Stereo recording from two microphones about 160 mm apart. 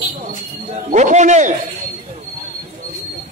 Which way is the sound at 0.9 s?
50° right (ahead or behind).